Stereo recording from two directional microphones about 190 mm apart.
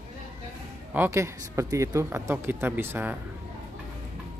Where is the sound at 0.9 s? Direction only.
10° right (ahead or behind).